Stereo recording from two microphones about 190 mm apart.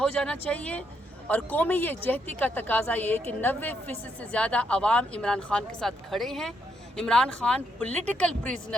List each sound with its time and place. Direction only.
0.0 s speech: 5° left (ahead or behind)